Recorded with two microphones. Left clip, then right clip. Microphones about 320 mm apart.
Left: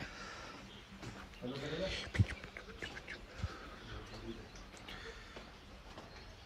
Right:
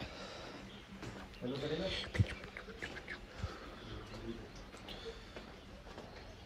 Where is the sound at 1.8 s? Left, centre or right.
Left.